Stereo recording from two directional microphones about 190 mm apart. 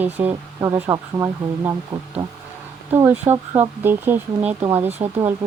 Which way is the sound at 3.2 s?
35° right (ahead or behind).